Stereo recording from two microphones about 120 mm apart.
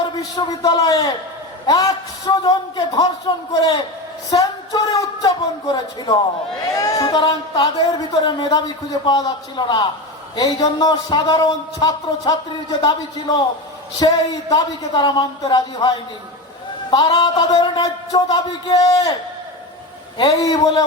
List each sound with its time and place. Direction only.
0.0 s a man's voice: 30° left (ahead or behind)
14.0 s speech: 35° left (ahead or behind)
20.1 s speech: 30° left (ahead or behind)